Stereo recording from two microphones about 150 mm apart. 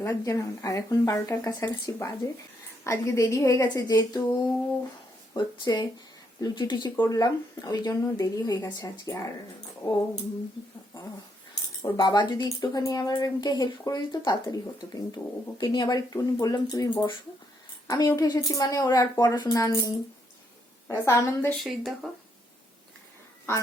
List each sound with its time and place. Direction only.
0.0 s speech: 20° left (ahead or behind)
6.9 s speech: 20° left (ahead or behind)
11.8 s speech: 30° left (ahead or behind)
20.9 s speech: 20° left (ahead or behind)
21.6 s speech: centre (ahead or behind)